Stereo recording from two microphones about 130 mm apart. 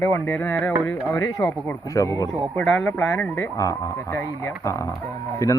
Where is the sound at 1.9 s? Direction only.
25° left (ahead or behind).